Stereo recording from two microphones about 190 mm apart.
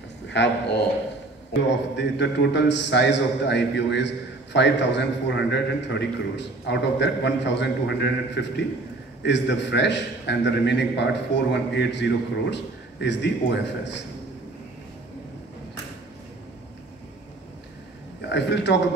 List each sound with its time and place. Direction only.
0.3 s a man's voice: 65° left (ahead or behind)
18.3 s a man's voice: 65° left (ahead or behind)